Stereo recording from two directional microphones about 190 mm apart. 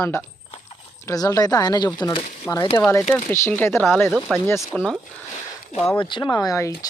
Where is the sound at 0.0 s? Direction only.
10° left (ahead or behind).